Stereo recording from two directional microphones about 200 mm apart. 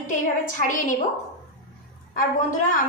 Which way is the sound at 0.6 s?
40° left (ahead or behind).